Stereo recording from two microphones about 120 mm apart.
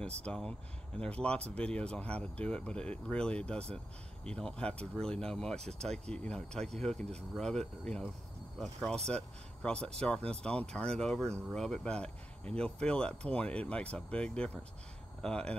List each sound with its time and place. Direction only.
0.2 s speech: 5° left (ahead or behind)